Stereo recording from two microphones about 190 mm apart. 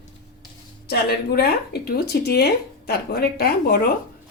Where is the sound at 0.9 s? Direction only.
55° left (ahead or behind).